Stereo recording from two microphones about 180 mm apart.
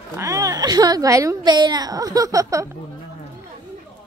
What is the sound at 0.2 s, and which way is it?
A woman's voice, 20° right (ahead or behind).